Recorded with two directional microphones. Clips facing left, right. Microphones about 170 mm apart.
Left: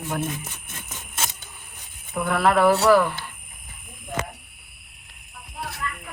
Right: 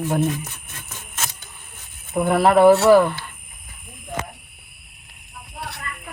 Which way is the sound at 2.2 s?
35° right (ahead or behind).